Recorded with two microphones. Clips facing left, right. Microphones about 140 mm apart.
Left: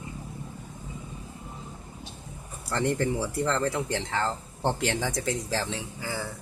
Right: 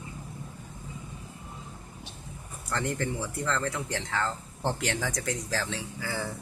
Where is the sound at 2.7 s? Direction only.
35° left (ahead or behind).